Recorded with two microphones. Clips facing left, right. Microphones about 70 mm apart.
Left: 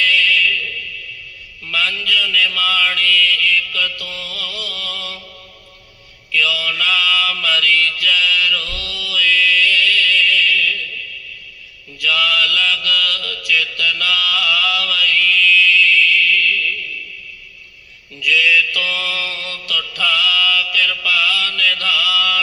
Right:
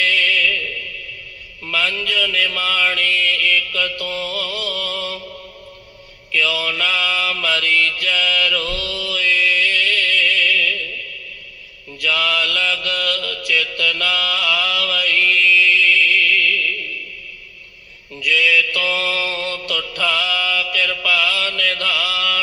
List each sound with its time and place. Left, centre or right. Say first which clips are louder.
0.0 s music: left 2 dB; right
1.6 s mantra: even; right
6.3 s mantra: left 1 dB; right
11.9 s mantra: left 2 dB; right
18.2 s mantra: left 1 dB; right